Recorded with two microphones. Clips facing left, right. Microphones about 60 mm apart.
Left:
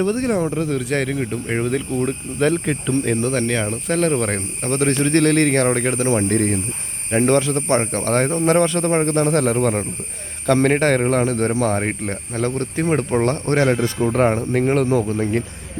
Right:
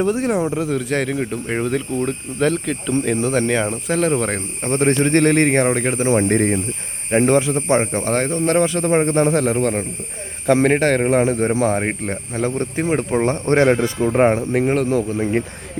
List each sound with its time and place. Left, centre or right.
0.0 s speech: centre
3.8 s speech: centre
4.6 s speech: right
5.6 s speech: centre
6.2 s speech: right
7.1 s speech: centre
8.3 s a man's voice: centre
8.5 s speech: centre
9.0 s speech: centre
9.3 s speech: centre
11.1 s speech: centre
13.2 s speech: right
14.3 s speech: centre